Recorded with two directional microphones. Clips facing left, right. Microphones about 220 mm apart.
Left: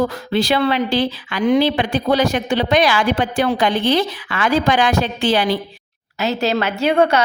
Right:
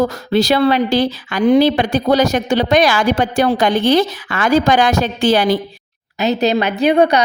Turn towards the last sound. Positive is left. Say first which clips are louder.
# right 3 dB
turn(degrees=-15)  # may be behind; listen again after turning